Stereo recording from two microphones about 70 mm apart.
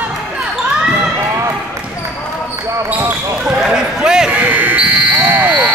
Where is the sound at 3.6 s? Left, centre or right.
Centre.